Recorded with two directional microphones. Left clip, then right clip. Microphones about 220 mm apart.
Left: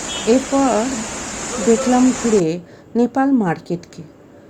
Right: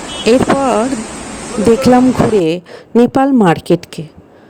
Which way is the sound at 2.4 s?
40° right (ahead or behind).